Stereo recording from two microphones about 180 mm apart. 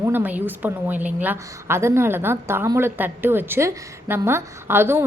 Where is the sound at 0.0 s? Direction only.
10° right (ahead or behind).